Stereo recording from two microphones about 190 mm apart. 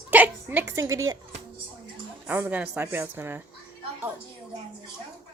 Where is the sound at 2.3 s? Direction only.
10° right (ahead or behind).